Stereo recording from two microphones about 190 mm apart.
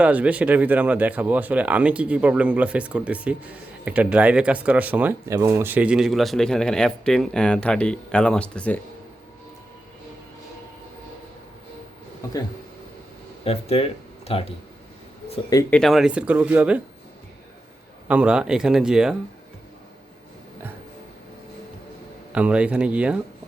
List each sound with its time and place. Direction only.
0.0 s speech: 5° right (ahead or behind)
12.2 s speech: 20° left (ahead or behind)
13.4 s speech: 30° left (ahead or behind)
15.7 s speech: centre (ahead or behind)
18.1 s speech: 5° right (ahead or behind)
22.3 s speech: 5° right (ahead or behind)